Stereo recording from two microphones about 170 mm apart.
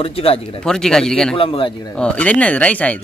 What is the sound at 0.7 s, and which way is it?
Speech, 5° left (ahead or behind).